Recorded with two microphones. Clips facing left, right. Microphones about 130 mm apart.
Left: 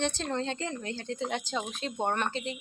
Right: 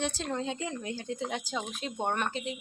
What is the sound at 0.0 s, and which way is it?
Speech, 5° right (ahead or behind).